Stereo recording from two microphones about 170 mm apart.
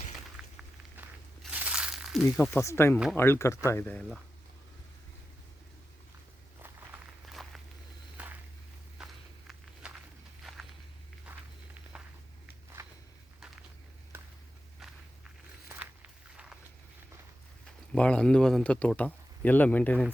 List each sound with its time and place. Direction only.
0.4 s a sound: 5° right (ahead or behind)
1.4 s crumpling: 10° right (ahead or behind)
2.4 s speech: 15° left (ahead or behind)
7.3 s a sound: centre (ahead or behind)
9.0 s walk: 5° right (ahead or behind)
11.9 s walk: 5° right (ahead or behind)
17.9 s speech: 5° left (ahead or behind)